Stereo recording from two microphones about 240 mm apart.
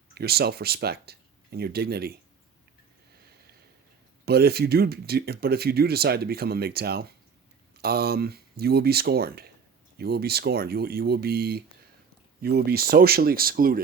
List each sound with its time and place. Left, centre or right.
0.1 s speech: right
4.3 s speech: right